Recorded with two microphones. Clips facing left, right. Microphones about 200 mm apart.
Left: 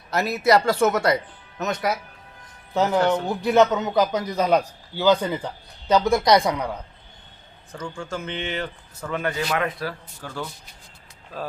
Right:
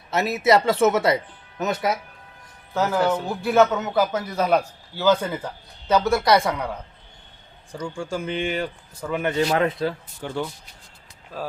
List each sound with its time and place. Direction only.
0.1 s speech: centre (ahead or behind)
3.0 s speech: 5° right (ahead or behind)
3.4 s a man's voice: 20° left (ahead or behind)
7.7 s speech: 10° right (ahead or behind)
9.2 s a man's voice: 30° right (ahead or behind)
11.3 s speech: 10° right (ahead or behind)